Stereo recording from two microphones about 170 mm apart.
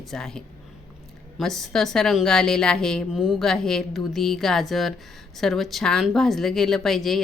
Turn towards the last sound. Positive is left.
turn(degrees=0)  # may be behind; listen again after turning